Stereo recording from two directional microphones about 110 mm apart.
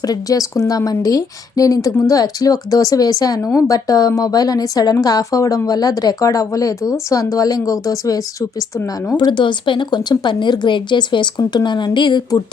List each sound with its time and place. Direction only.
0.0 s speech: 35° left (ahead or behind)
9.1 s speech: 45° left (ahead or behind)